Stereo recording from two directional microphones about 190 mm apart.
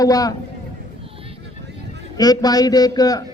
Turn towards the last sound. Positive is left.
turn(degrees=20)  # may be behind; listen again after turning